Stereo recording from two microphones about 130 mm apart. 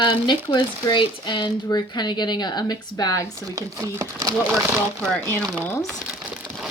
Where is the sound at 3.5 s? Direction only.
25° right (ahead or behind).